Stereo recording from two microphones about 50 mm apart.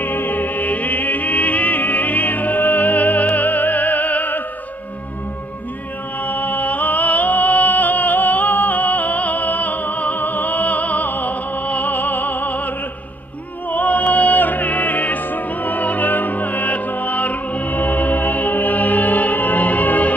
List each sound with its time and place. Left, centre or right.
0.0 s music: left
6.2 s music: left